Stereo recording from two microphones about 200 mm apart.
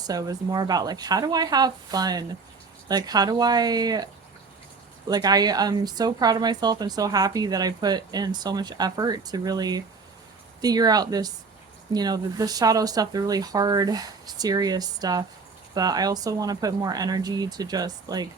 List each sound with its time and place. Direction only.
0.0 s speech: 20° right (ahead or behind)